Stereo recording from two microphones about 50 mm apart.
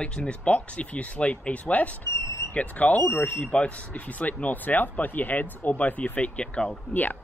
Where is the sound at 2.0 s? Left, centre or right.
Left.